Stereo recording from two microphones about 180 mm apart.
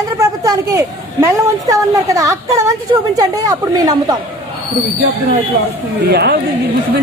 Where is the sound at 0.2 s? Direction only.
20° right (ahead or behind).